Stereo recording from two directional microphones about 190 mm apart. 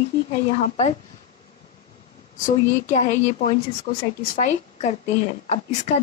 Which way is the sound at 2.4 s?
40° left (ahead or behind).